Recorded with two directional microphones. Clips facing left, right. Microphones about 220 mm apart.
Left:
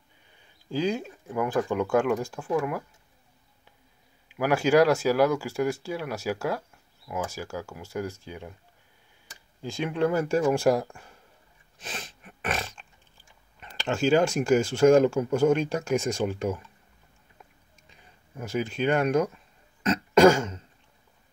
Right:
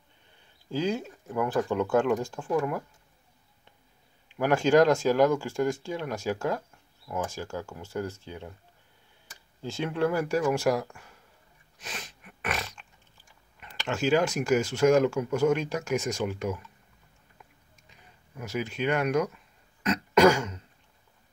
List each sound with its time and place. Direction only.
0.7 s speech: 15° left (ahead or behind)
4.3 s speech: 10° left (ahead or behind)
9.6 s speech: 15° left (ahead or behind); by 11.1 s 30° left (ahead or behind)
11.8 s a sound: 30° left (ahead or behind)
13.6 s speech: 30° left (ahead or behind)
18.4 s speech: 30° left (ahead or behind)
19.8 s throat clearing: 30° left (ahead or behind)